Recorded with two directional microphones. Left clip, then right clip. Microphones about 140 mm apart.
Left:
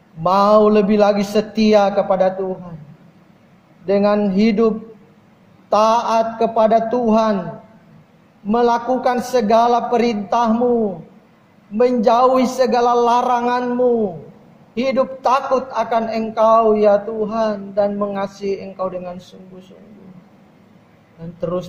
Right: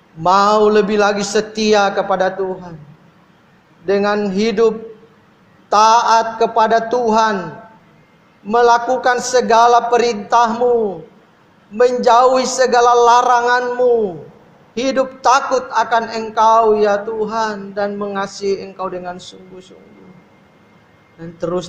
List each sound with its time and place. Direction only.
0.2 s a man's voice: 30° right (ahead or behind)
3.8 s a man's voice: 30° right (ahead or behind)
8.5 s a man's voice: 30° right (ahead or behind)
11.7 s a man's voice: 30° right (ahead or behind)
21.4 s a man's voice: 30° right (ahead or behind)